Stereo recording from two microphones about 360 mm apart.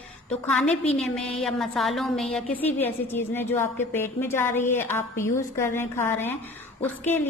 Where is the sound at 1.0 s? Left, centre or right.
Centre.